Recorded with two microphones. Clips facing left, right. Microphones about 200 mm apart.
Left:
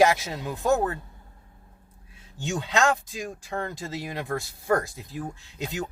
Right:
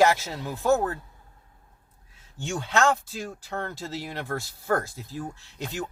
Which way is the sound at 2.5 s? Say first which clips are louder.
Even; 15° left (ahead or behind).